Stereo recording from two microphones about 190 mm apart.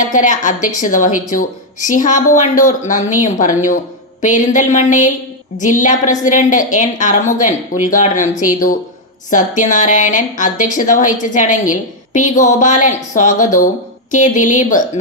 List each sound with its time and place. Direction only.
0.0 s a woman's voice: 40° left (ahead or behind)